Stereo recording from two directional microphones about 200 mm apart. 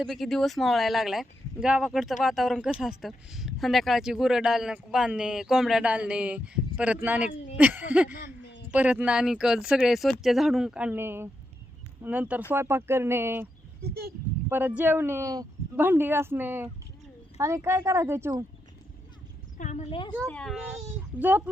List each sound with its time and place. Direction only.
0.0 s speech: centre (ahead or behind)
13.8 s speech: 50° right (ahead or behind)
14.8 s speech: 10° right (ahead or behind)
19.5 s a woman's voice: 35° left (ahead or behind)
20.2 s speech: 5° left (ahead or behind)
21.2 s speech: 10° right (ahead or behind)